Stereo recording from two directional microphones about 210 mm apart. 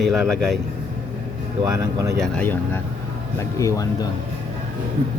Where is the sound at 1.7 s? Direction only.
15° right (ahead or behind).